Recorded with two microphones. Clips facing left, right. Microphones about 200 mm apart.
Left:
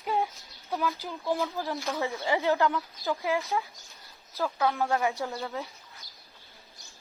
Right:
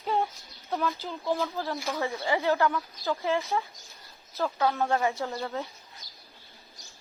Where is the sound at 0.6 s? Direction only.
Centre (ahead or behind).